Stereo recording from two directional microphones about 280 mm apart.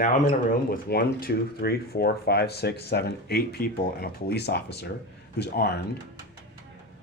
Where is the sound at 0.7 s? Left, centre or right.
Left.